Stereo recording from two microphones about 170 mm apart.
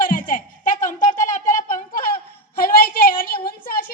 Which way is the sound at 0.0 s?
55° left (ahead or behind).